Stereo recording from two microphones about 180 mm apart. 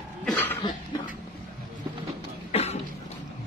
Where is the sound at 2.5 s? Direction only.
35° left (ahead or behind).